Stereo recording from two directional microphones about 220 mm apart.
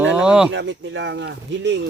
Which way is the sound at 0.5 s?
55° right (ahead or behind).